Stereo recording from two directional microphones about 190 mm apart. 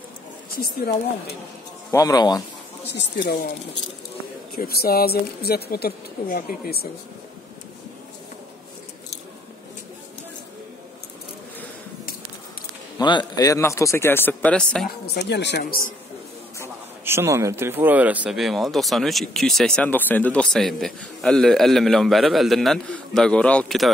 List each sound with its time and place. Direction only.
0.6 s speech: 55° left (ahead or behind)
1.9 s speech: 20° left (ahead or behind)
2.9 s speech: 60° left (ahead or behind)
4.6 s speech: 55° left (ahead or behind)
13.0 s speech: 25° left (ahead or behind); by 14.9 s 5° left (ahead or behind)
15.1 s speech: 60° left (ahead or behind)
17.0 s speech: 15° right (ahead or behind); by 23.9 s 5° left (ahead or behind)